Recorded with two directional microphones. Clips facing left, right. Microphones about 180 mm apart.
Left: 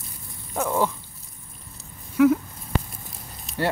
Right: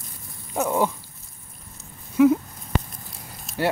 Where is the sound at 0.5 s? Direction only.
15° right (ahead or behind).